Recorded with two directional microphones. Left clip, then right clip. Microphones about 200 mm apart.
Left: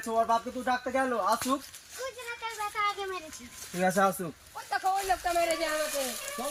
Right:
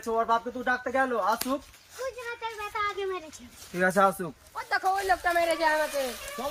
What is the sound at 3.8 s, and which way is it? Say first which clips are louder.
Speech: right 3 dB; 15° right (ahead or behind).